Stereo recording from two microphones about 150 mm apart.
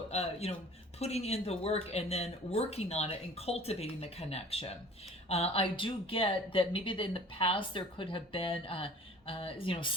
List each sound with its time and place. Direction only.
0.1 s speech: 45° left (ahead or behind)